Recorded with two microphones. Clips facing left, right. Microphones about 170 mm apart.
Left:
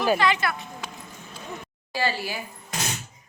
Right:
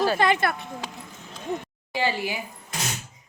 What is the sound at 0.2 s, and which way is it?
Speech, 50° right (ahead or behind).